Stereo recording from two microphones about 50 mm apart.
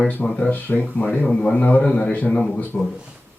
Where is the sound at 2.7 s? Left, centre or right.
Centre.